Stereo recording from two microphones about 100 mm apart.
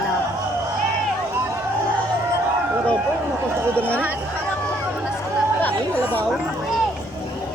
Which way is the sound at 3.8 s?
15° left (ahead or behind).